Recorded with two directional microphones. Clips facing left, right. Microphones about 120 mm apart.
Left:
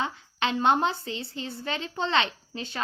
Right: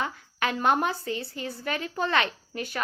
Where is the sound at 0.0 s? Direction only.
25° left (ahead or behind).